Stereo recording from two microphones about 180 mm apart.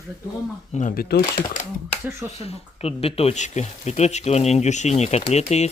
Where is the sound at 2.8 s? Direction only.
35° left (ahead or behind).